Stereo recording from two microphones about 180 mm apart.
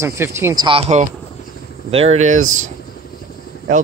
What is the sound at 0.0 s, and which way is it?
Speech, 15° right (ahead or behind).